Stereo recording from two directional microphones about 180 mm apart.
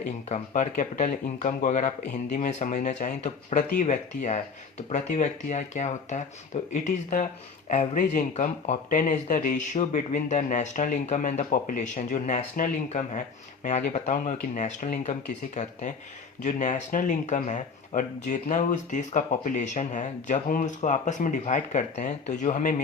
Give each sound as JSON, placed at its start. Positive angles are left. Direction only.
{"t": 0.0, "sound": "speech", "side_deg": 40}